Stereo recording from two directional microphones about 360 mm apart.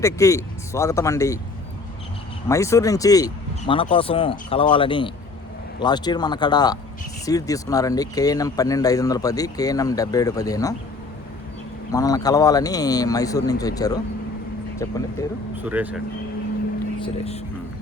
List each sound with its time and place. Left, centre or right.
0.0 s speech: centre
2.5 s speech: centre
11.9 s speech: centre
15.6 s speech: centre
17.0 s speech: centre